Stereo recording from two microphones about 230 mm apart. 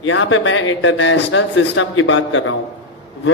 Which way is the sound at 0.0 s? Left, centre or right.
Left.